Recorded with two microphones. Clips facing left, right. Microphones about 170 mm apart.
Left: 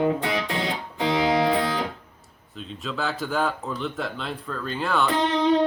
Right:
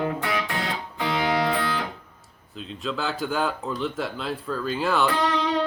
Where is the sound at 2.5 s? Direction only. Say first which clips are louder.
Right 1 dB; centre (ahead or behind).